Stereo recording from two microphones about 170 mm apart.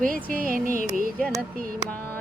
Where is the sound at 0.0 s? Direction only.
55° right (ahead or behind).